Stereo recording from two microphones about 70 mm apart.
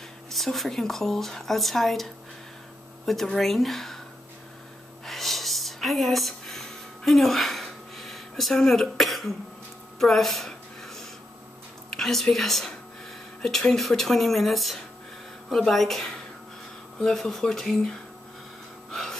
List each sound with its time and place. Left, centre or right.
0.3 s a woman's voice: centre
5.0 s a sound: centre
11.9 s a woman's voice: centre
18.9 s gasp: centre